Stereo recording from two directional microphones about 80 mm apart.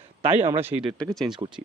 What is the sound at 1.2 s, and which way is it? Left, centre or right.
Speech, right.